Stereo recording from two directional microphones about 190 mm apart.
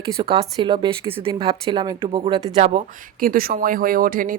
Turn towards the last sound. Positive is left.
turn(degrees=-45)  # may be behind; listen again after turning